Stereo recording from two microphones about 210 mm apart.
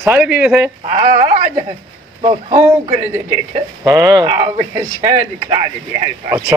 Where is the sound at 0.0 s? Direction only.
10° right (ahead or behind).